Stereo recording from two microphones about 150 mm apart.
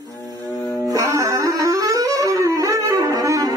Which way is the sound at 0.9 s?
20° right (ahead or behind).